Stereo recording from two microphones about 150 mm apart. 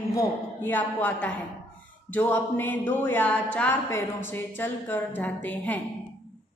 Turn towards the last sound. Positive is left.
turn(degrees=10)  # may be behind; listen again after turning